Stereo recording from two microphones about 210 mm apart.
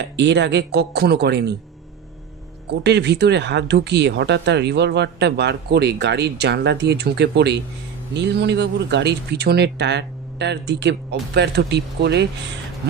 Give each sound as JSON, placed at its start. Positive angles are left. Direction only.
{"t": 0.0, "sound": "speech", "side_deg": -55}
{"t": 2.7, "sound": "speech", "side_deg": -55}